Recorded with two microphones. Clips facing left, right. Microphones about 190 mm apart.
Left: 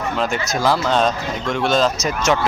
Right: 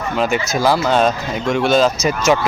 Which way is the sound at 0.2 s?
5° right (ahead or behind).